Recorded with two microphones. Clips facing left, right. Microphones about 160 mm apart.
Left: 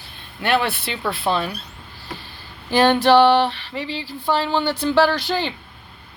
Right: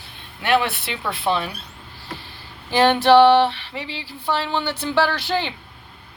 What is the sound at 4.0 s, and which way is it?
Speech, 40° left (ahead or behind).